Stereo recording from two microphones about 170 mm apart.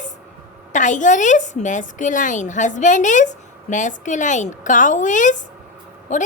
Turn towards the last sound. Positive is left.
turn(degrees=45)  # may be behind; listen again after turning